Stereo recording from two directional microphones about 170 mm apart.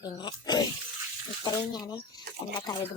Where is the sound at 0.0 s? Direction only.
25° left (ahead or behind).